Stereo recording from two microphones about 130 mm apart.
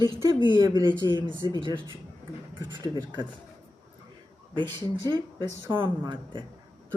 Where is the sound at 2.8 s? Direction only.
35° right (ahead or behind).